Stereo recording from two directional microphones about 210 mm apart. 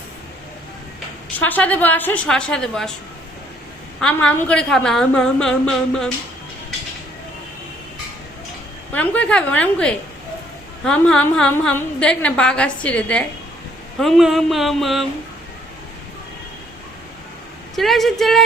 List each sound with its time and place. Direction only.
1.4 s a woman's voice: 5° left (ahead or behind)
4.0 s a woman's voice: 5° left (ahead or behind)
8.9 s a woman's voice: 5° left (ahead or behind)
17.7 s a woman's voice: centre (ahead or behind)